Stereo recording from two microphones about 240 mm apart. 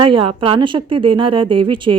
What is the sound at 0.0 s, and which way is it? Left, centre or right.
A woman's voice, right.